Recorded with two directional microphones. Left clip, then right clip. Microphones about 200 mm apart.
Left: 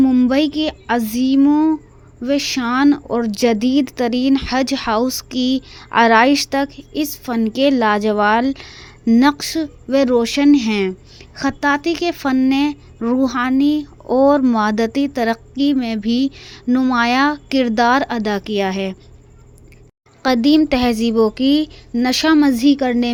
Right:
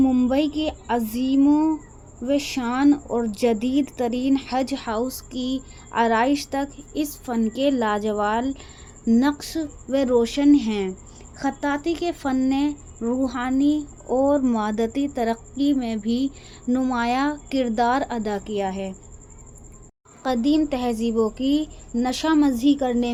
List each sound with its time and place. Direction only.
0.0 s a sound: 35° left (ahead or behind)
2.2 s speech: 35° left (ahead or behind)
20.2 s speech: 35° left (ahead or behind)